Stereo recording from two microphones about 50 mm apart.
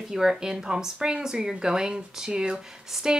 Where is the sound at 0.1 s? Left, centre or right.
Centre.